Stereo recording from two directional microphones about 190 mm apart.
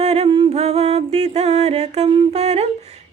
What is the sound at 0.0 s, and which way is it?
Music, 35° right (ahead or behind).